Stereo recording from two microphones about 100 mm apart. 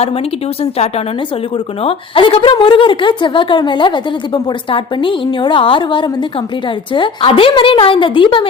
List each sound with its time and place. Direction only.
0.6 s speech: 90° left
1.8 s a woman's voice: 65° left (ahead or behind)